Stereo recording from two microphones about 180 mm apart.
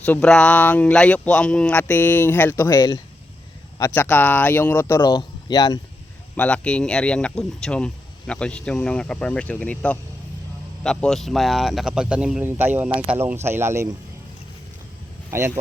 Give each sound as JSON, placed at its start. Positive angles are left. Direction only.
{"t": 0.0, "sound": "speech", "side_deg": 5}
{"t": 4.9, "sound": "speech", "side_deg": 25}
{"t": 6.3, "sound": "speech", "side_deg": 5}
{"t": 15.3, "sound": "speech", "side_deg": -15}